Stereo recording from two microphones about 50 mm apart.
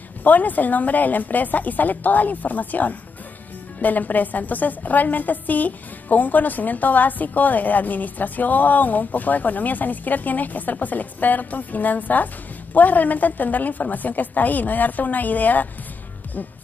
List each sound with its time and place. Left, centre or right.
0.2 s a woman's voice: left